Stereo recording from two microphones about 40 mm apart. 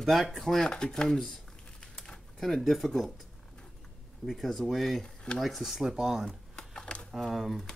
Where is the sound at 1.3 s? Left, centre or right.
Left.